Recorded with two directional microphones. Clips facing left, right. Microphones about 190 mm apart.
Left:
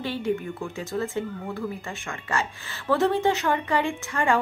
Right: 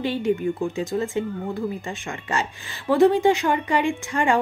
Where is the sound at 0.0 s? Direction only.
15° right (ahead or behind).